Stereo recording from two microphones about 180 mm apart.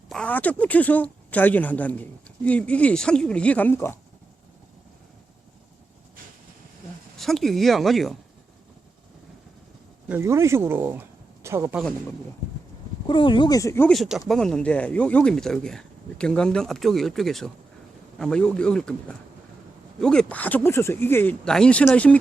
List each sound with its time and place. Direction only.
0.1 s speech: 5° left (ahead or behind)
7.2 s speech: centre (ahead or behind)
10.1 s speech: 15° right (ahead or behind)
13.1 s speech: 25° left (ahead or behind)
13.9 s speech: centre (ahead or behind)